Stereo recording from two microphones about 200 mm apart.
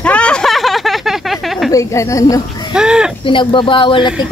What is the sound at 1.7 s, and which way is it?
Speech, 15° left (ahead or behind).